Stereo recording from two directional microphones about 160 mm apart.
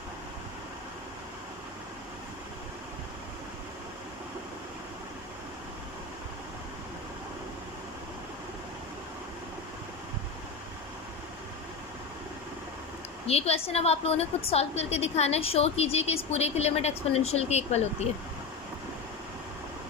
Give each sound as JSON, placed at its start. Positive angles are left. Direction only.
{"t": 13.2, "sound": "a woman's voice", "side_deg": 40}